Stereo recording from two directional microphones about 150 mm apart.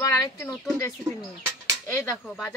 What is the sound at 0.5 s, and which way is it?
Speech, 20° left (ahead or behind).